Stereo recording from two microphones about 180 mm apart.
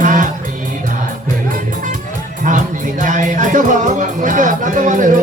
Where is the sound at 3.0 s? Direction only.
45° right (ahead or behind).